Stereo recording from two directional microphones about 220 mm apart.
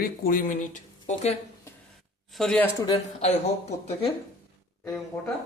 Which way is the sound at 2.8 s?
25° left (ahead or behind).